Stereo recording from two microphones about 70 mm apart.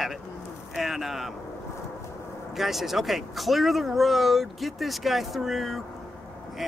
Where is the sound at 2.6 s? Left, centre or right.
Centre.